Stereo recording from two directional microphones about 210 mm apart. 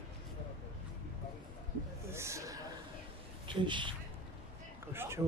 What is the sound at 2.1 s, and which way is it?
Speech, 15° right (ahead or behind).